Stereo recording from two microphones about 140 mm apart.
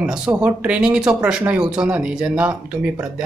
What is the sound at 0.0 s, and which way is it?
Speech, 5° right (ahead or behind).